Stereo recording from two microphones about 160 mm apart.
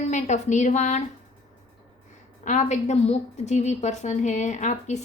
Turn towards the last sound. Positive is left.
turn(degrees=50)  # may be behind; listen again after turning